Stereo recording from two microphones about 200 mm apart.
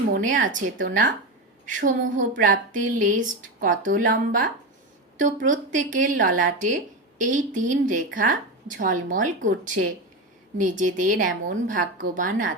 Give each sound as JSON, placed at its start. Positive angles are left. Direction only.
{"t": 0.1, "sound": "a woman's voice", "side_deg": -40}